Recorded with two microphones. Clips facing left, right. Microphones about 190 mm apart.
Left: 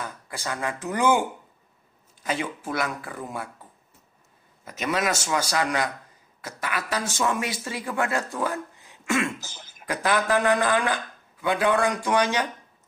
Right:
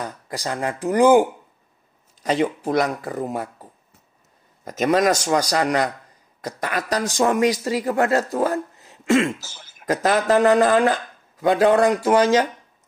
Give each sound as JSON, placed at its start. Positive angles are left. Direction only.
{"t": 0.0, "sound": "speech", "side_deg": -35}
{"t": 0.9, "sound": "speech", "side_deg": -15}
{"t": 2.2, "sound": "speech", "side_deg": -40}
{"t": 4.6, "sound": "speech", "side_deg": -40}